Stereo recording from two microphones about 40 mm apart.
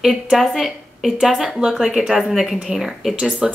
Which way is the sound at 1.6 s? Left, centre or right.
Centre.